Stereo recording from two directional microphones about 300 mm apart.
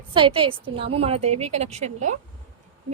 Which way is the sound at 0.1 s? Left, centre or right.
Centre.